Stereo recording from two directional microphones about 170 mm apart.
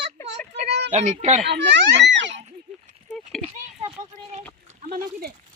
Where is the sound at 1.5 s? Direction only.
90° right.